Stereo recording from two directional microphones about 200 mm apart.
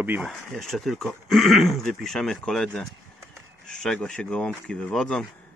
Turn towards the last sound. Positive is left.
turn(degrees=5)  # may be behind; listen again after turning